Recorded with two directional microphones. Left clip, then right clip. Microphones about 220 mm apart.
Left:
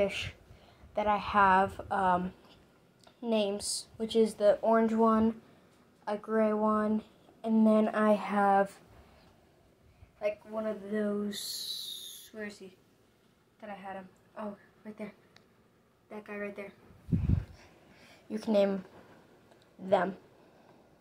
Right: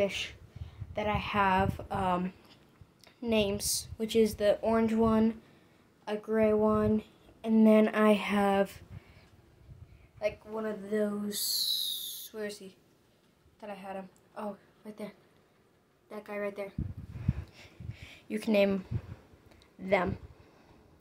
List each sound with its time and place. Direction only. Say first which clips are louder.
0.0 s a woman's voice: even; 10° right (ahead or behind)
7.5 s a sound: right 3 dB; 20° right (ahead or behind)
10.2 s a woman's voice: even; 15° right (ahead or behind)
12.3 s a sound: right 3 dB; 25° right (ahead or behind)
13.6 s a woman's voice: right 1 dB; 20° right (ahead or behind)
16.1 s a woman's voice: right 3 dB; 15° right (ahead or behind)
18.0 s speech: right 2 dB; 20° right (ahead or behind)
19.9 s a woman's voice: left 1 dB; 15° right (ahead or behind)